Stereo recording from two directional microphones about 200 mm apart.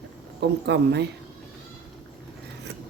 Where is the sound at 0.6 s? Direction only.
60° right (ahead or behind).